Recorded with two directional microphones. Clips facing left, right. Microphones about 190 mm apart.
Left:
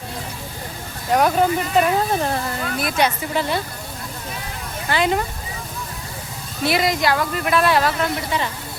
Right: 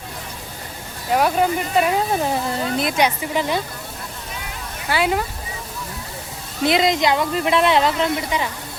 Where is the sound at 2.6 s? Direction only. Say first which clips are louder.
Right 1 dB; 25° right (ahead or behind).